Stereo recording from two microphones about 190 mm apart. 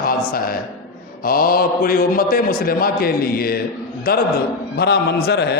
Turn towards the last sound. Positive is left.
turn(degrees=60)  # may be behind; listen again after turning